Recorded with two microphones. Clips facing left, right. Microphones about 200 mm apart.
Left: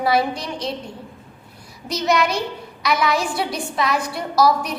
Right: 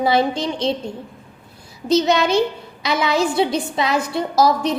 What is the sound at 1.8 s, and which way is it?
A woman's voice, 25° right (ahead or behind).